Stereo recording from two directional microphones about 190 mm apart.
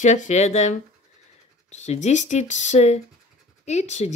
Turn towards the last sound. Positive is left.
turn(degrees=35)  # may be behind; listen again after turning